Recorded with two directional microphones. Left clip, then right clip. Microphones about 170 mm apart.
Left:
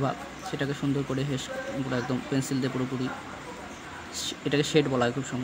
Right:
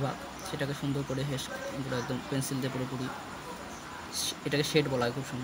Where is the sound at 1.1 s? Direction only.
30° left (ahead or behind).